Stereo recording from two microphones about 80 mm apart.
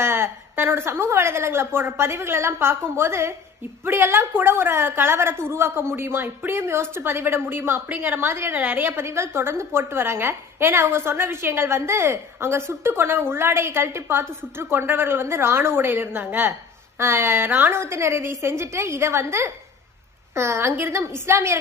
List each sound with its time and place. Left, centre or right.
0.0 s a woman's voice: right